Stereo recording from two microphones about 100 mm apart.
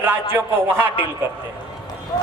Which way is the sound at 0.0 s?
20° right (ahead or behind).